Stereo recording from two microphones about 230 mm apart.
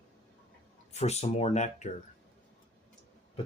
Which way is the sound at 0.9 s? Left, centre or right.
Left.